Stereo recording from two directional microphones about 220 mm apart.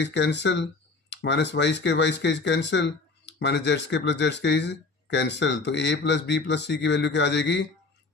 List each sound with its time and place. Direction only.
0.0 s speech: 50° left (ahead or behind)